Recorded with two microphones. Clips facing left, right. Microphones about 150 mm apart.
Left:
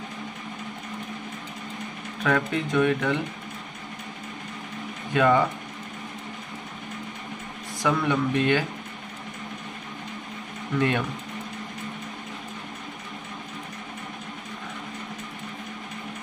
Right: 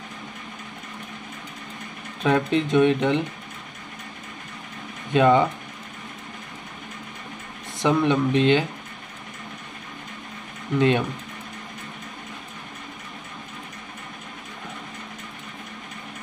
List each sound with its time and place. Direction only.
2.2 s speech: 20° right (ahead or behind)
5.1 s speech: 20° right (ahead or behind)
7.8 s speech: 20° right (ahead or behind)
10.8 s speech: 20° right (ahead or behind)